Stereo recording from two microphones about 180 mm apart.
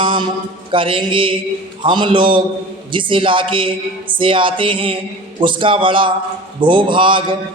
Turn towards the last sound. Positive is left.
turn(degrees=-30)  # may be behind; listen again after turning